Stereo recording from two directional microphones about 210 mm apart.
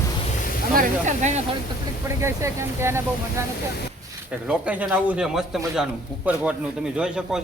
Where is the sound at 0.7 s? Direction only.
35° right (ahead or behind).